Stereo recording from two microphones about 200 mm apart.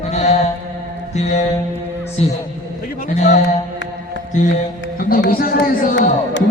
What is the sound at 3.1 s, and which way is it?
Music, 35° left (ahead or behind).